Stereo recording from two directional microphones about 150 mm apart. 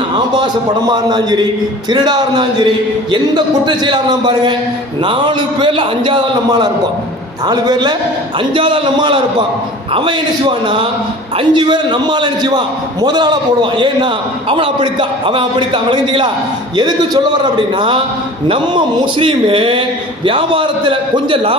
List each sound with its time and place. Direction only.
0.4 s a man's voice: 30° right (ahead or behind)
11.3 s a man's voice: 30° right (ahead or behind)